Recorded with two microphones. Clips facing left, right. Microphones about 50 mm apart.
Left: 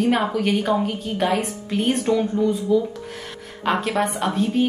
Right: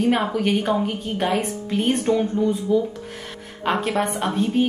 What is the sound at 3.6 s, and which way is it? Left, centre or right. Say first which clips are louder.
Speech: left 1 dB; centre.